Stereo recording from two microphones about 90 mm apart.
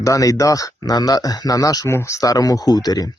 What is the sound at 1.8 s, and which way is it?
Speech, 30° left (ahead or behind).